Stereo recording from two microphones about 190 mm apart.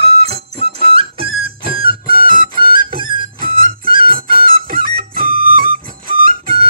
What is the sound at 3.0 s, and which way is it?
Music, 25° right (ahead or behind).